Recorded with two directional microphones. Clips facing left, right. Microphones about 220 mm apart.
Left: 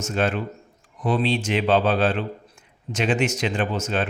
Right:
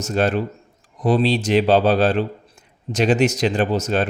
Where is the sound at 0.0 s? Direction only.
40° right (ahead or behind).